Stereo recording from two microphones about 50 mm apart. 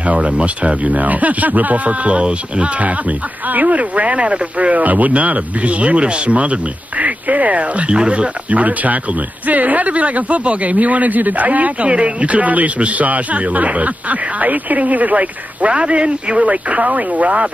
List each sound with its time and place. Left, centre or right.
0.0 s speech: right